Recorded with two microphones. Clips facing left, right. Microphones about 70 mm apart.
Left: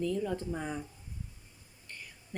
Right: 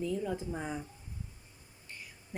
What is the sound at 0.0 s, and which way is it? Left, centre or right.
Speech, centre.